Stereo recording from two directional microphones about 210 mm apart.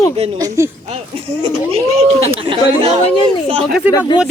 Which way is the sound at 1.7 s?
30° right (ahead or behind).